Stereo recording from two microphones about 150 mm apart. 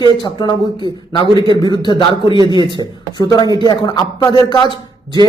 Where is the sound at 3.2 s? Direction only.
25° left (ahead or behind).